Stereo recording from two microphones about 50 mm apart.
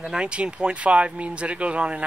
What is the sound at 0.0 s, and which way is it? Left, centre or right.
Speech, centre.